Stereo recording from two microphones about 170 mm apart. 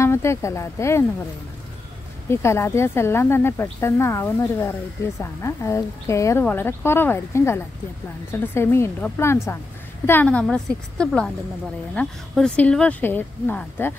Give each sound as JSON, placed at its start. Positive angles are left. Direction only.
{"t": 0.0, "sound": "speech", "side_deg": 15}
{"t": 2.2, "sound": "a woman's voice", "side_deg": 15}